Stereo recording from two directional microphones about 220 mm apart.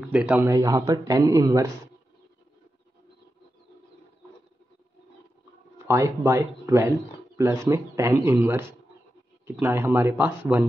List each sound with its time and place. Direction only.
0.0 s speech: 5° right (ahead or behind)
5.9 s speech: 15° right (ahead or behind)